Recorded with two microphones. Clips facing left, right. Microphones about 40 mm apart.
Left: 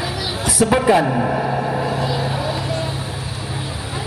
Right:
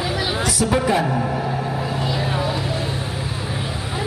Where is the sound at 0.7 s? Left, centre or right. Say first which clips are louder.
Left 5 dB; left.